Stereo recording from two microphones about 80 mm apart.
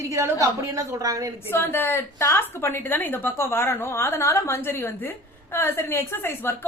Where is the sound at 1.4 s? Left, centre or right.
Left.